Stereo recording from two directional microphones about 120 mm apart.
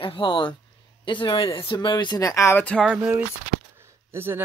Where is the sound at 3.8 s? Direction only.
20° right (ahead or behind).